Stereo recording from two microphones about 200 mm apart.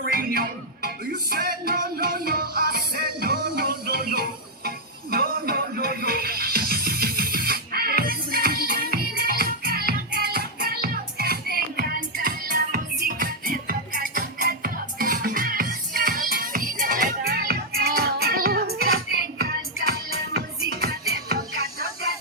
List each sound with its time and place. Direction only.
0.0 s music: 50° right (ahead or behind)